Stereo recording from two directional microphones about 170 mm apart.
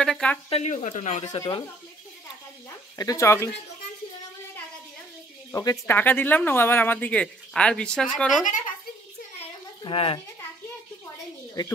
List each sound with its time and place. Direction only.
0.0 s speech: 5° left (ahead or behind)
0.5 s speech: 40° left (ahead or behind)
1.4 s speech: 20° left (ahead or behind)
3.0 s speech: 20° left (ahead or behind)
5.5 s speech: 20° left (ahead or behind); by 8.5 s centre (ahead or behind)
8.5 s a child's voice: 50° left (ahead or behind)
9.8 s a child's voice: 30° left (ahead or behind)
11.6 s speech: 25° left (ahead or behind)